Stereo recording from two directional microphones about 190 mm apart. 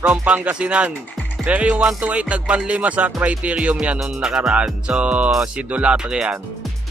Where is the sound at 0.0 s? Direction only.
5° right (ahead or behind).